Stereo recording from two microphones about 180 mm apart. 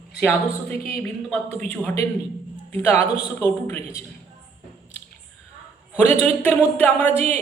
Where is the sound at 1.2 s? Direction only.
5° left (ahead or behind).